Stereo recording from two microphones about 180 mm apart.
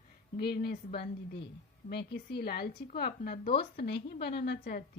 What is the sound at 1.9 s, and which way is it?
A woman's voice, 65° left (ahead or behind).